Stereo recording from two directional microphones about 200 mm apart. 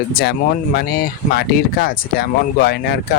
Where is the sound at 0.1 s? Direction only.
50° left (ahead or behind).